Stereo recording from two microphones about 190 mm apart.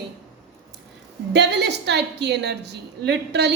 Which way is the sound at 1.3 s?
65° right (ahead or behind).